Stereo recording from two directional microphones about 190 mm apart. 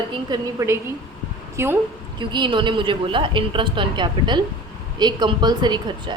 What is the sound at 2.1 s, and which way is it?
Speech, 25° right (ahead or behind).